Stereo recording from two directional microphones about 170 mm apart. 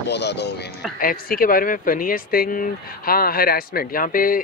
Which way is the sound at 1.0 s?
55° left (ahead or behind).